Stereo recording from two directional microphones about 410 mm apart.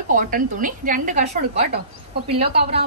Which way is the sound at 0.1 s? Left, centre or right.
Centre.